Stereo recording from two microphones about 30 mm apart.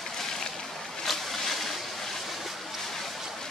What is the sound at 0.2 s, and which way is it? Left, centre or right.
Boat, centre.